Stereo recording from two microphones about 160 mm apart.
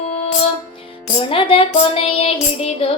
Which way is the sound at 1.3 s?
35° left (ahead or behind).